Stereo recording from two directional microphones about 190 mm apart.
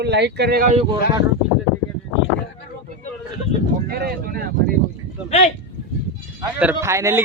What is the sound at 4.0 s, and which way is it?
Speech, 55° right (ahead or behind).